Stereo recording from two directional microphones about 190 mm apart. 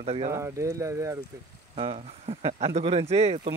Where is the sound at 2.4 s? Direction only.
35° right (ahead or behind).